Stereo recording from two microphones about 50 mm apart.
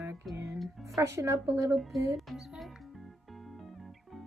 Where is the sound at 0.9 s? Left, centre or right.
Right.